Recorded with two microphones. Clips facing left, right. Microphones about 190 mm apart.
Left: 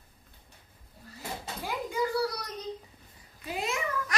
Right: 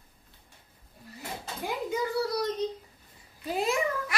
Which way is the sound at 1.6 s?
20° right (ahead or behind).